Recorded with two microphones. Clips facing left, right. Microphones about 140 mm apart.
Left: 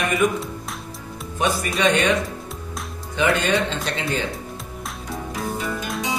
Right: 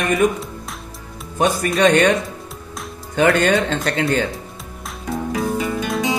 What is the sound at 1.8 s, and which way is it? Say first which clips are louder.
Speech: right 5 dB; 55° right (ahead or behind).